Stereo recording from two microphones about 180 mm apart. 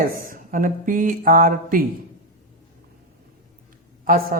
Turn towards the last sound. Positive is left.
turn(degrees=-55)  # may be behind; listen again after turning